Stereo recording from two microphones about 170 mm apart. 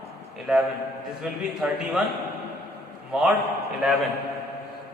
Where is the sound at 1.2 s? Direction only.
Centre (ahead or behind).